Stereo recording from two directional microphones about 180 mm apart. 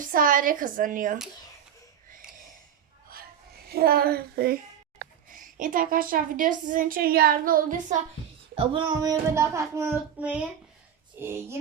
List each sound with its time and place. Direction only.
0.0 s a woman's voice: 50° right (ahead or behind)
3.7 s speech: 55° right (ahead or behind)
5.3 s a woman's voice: 45° right (ahead or behind)
8.5 s child singing: 30° right (ahead or behind); by 11.5 s 15° right (ahead or behind)